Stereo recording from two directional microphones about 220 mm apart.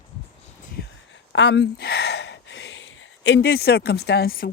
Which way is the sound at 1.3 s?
50° left (ahead or behind).